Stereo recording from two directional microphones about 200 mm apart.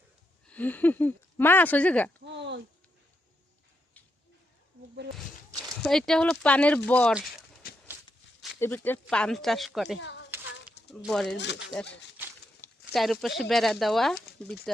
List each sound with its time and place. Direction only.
0.4 s speech: 10° left (ahead or behind)
2.2 s a sound: 60° right (ahead or behind)
5.1 s speech: centre (ahead or behind)
8.5 s speech: 10° left (ahead or behind)
10.0 s a sound: 60° left (ahead or behind)
11.0 s speech: centre (ahead or behind)
11.3 s speech: 60° left (ahead or behind)
11.9 s a sound: 60° left (ahead or behind)
12.8 s speech: centre (ahead or behind)